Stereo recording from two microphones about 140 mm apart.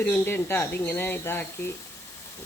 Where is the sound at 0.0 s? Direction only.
10° left (ahead or behind).